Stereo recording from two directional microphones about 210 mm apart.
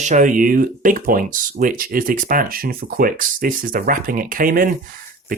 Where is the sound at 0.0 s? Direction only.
35° right (ahead or behind).